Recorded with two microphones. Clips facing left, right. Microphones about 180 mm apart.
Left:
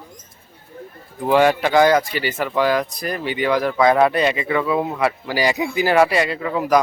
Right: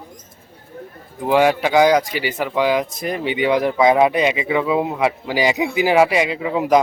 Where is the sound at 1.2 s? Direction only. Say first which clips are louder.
Even; 10° right (ahead or behind).